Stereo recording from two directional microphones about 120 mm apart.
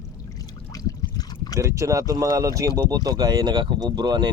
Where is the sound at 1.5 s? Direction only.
25° right (ahead or behind).